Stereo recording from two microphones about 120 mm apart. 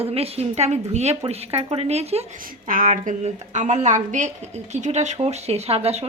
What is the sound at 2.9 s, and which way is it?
A woman's voice, 80° right.